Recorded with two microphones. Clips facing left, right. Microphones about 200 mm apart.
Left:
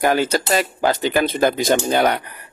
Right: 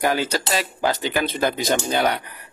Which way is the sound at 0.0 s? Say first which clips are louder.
Left 4 dB; 50° left (ahead or behind).